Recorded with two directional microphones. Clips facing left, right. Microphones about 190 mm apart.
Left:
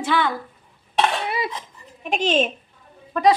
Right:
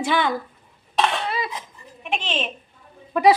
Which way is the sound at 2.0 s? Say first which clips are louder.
Left 7 dB; 40° left (ahead or behind).